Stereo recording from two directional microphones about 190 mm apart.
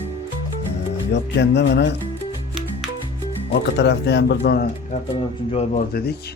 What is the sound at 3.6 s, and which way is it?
A man's voice, 65° left (ahead or behind).